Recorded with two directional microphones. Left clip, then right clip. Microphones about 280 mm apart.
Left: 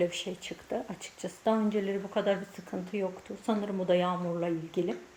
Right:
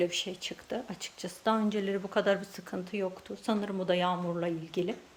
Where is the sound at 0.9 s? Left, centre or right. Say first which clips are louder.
Even; right.